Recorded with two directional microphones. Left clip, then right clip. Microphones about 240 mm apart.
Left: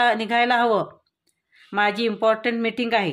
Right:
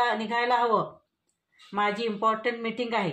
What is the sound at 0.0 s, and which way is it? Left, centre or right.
Speech, left.